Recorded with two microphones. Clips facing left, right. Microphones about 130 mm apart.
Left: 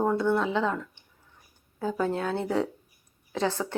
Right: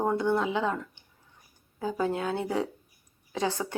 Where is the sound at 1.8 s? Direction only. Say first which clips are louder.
Left 1 dB; 10° right (ahead or behind).